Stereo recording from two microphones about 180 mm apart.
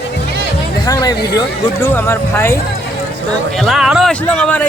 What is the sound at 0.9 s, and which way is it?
Speech, 20° left (ahead or behind).